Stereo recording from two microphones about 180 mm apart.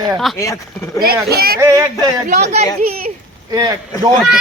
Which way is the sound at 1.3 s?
55° right (ahead or behind).